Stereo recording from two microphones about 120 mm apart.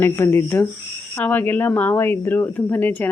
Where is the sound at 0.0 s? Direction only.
20° left (ahead or behind).